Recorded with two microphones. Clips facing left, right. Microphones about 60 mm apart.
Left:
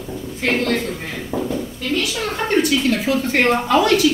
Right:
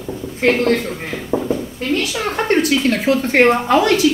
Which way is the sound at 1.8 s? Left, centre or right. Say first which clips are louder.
Even; right.